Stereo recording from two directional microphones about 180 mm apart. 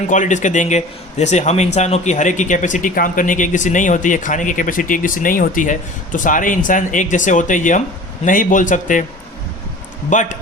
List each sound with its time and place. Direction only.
0.1 s speech: 40° left (ahead or behind)
10.1 s speech: 45° left (ahead or behind)